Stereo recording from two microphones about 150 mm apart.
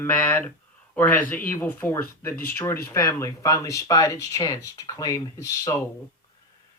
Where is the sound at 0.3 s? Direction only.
10° left (ahead or behind).